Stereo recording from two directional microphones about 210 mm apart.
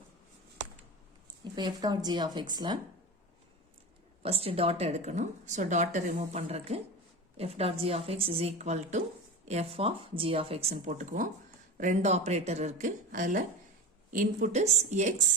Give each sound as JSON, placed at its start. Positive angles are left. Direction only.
{"t": 1.5, "sound": "a woman's voice", "side_deg": -20}
{"t": 4.2, "sound": "a woman's voice", "side_deg": -30}